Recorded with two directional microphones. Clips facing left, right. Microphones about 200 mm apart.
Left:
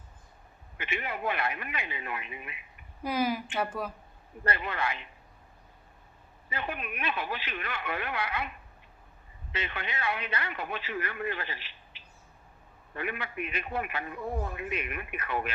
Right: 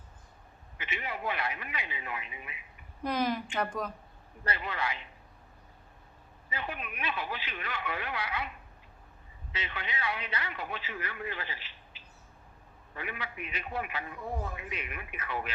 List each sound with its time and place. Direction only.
0.8 s speech: 55° left (ahead or behind)
3.0 s a woman's voice: 5° left (ahead or behind)
4.4 s a man's voice: 55° left (ahead or behind)
6.5 s a man's voice: 60° left (ahead or behind)
9.5 s a man's voice: 55° left (ahead or behind)